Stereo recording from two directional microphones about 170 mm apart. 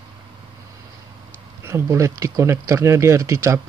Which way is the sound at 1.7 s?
15° right (ahead or behind).